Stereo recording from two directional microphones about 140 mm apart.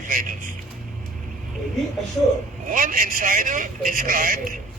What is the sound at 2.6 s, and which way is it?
A man's voice, 75° right (ahead or behind).